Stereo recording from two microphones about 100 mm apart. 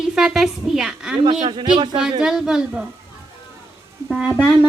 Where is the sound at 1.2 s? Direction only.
60° right (ahead or behind).